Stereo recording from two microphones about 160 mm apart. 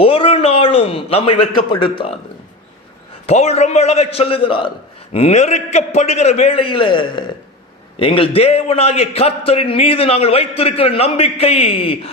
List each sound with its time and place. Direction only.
0.0 s a man's voice: 35° left (ahead or behind)
3.2 s a man's voice: 40° left (ahead or behind)